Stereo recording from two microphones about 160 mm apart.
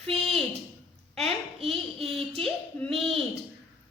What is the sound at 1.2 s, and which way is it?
A child's voice, 40° right (ahead or behind).